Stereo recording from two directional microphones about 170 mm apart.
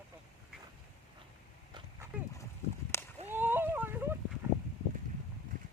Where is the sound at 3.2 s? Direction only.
10° right (ahead or behind).